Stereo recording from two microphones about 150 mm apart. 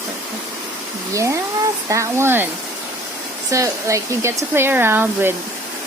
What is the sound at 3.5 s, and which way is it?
Speech, 20° right (ahead or behind).